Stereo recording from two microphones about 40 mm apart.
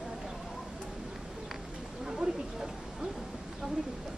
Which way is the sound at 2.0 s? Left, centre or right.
Centre.